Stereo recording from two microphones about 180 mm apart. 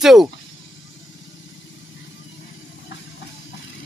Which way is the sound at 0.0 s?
Centre (ahead or behind).